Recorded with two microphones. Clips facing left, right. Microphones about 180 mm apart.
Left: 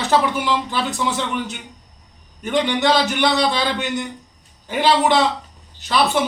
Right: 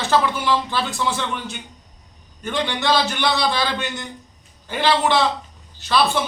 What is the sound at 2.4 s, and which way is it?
A man's voice, 20° left (ahead or behind).